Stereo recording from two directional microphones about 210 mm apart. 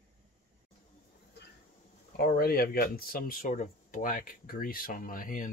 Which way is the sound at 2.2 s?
45° left (ahead or behind).